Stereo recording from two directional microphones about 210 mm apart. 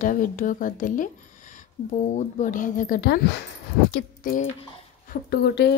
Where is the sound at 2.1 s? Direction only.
40° left (ahead or behind).